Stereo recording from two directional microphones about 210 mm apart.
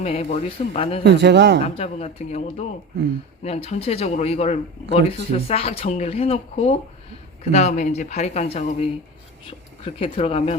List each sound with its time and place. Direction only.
0.0 s speech: 30° left (ahead or behind)
1.0 s speech: 55° right (ahead or behind)
1.6 s speech: 30° left (ahead or behind)